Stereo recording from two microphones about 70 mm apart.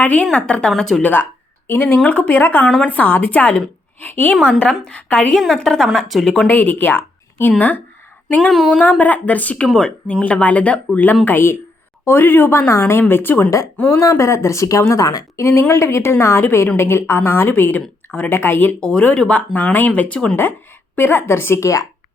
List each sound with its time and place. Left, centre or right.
0.0 s speech: left; by 1.0 s centre
1.0 s speech: left
2.0 s speech: left
4.6 s speech: centre
5.3 s speech: centre
6.5 s speech: left
8.4 s speech: centre
8.8 s speech: left
9.6 s speech: centre
10.1 s speech: centre
11.3 s speech: left
13.9 s speech: left
18.8 s speech: centre
20.9 s speech: left